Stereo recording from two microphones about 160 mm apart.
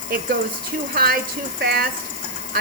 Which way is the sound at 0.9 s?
70° right (ahead or behind).